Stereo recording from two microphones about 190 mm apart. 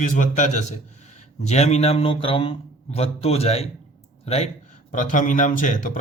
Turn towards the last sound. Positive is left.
turn(degrees=40)  # may be behind; listen again after turning